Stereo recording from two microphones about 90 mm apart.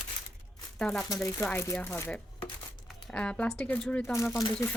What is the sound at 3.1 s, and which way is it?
Speech, 10° left (ahead or behind).